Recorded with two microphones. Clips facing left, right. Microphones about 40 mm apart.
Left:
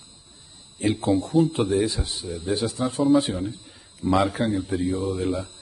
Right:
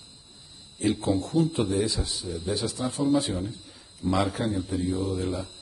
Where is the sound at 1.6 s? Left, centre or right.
Left.